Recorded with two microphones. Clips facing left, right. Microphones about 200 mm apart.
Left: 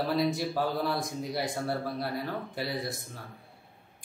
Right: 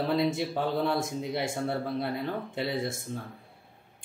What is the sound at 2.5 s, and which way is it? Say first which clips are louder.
Speech: right 3 dB; 25° right (ahead or behind).